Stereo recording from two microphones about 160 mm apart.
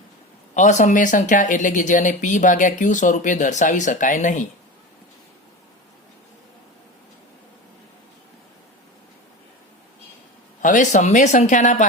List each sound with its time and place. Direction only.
0.5 s speech: 50° left (ahead or behind)
10.6 s speech: 50° left (ahead or behind)